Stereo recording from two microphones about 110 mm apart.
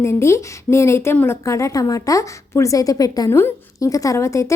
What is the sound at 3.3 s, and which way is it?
A woman's voice, 20° left (ahead or behind).